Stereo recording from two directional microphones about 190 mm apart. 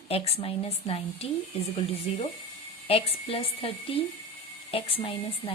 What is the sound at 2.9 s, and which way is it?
A woman's voice, 30° left (ahead or behind).